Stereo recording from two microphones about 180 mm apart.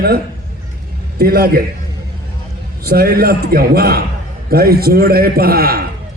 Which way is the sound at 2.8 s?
55° right (ahead or behind).